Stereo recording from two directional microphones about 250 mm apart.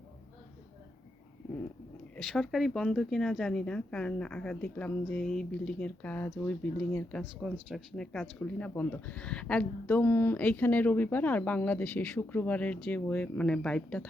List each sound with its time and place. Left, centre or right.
2.1 s speech: centre